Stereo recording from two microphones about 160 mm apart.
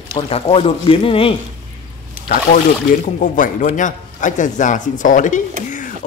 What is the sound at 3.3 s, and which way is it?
Speech, 55° left (ahead or behind).